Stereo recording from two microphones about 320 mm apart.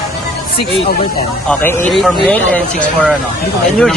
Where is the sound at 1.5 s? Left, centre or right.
Centre.